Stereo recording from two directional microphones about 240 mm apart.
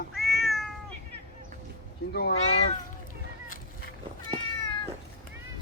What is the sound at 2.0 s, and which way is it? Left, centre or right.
Speech, left.